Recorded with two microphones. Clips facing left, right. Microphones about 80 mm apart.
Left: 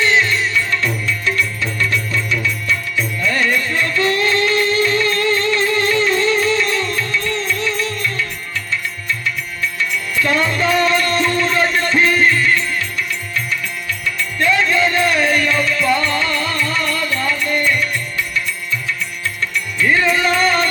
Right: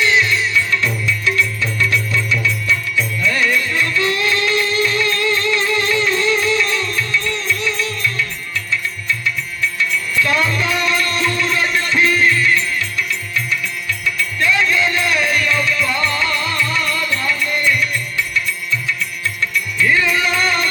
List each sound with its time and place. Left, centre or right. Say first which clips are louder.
0.0 s music: even; left
14.2 s music: left 1 dB; left
19.4 s music: right 1 dB; left